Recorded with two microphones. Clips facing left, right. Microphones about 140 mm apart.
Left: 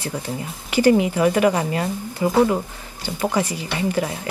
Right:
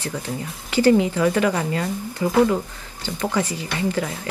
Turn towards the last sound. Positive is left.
turn(degrees=20)  # may be behind; listen again after turning